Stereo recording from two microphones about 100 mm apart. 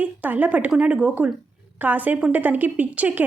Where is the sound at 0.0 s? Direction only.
15° right (ahead or behind).